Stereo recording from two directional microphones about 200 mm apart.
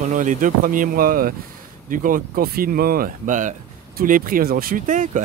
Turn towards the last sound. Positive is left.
turn(degrees=-40)  # may be behind; listen again after turning